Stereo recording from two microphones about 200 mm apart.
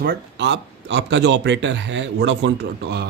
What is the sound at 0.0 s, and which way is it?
A man's voice, 55° right (ahead or behind).